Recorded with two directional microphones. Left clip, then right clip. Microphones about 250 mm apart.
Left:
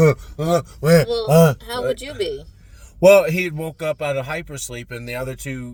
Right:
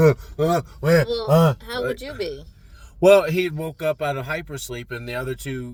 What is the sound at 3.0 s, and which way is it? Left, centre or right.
A man's voice, centre.